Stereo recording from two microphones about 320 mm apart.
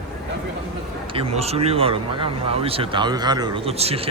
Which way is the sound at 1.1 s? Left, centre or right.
Centre.